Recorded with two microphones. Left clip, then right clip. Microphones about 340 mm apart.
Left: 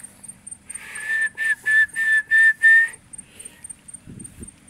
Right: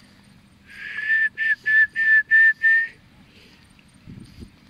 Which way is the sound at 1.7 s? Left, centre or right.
Centre.